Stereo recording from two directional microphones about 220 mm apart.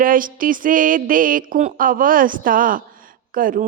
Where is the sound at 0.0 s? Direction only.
40° right (ahead or behind).